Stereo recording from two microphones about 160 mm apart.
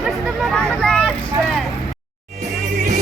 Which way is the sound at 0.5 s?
5° left (ahead or behind).